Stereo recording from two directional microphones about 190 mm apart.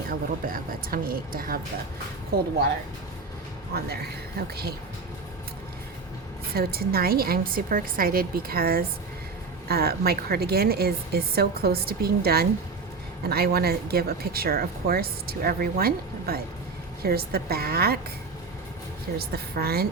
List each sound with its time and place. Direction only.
0.1 s speech: 50° right (ahead or behind)
4.4 s speech: 55° right (ahead or behind)
6.5 s speech: 55° right (ahead or behind)
19.2 s speech: 55° right (ahead or behind)